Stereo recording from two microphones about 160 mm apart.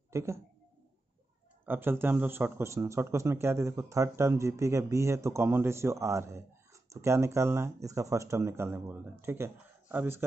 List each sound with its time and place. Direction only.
0.1 s speech: 15° right (ahead or behind)
1.7 s speech: 15° right (ahead or behind)